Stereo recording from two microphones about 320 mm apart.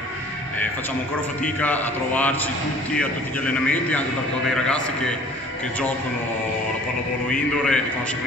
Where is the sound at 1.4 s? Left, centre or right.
Centre.